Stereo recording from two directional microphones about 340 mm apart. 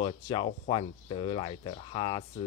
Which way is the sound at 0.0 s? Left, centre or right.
Centre.